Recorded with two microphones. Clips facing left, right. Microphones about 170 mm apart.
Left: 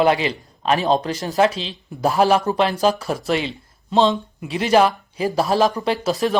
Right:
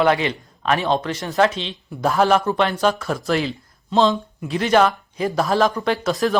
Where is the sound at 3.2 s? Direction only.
Centre (ahead or behind).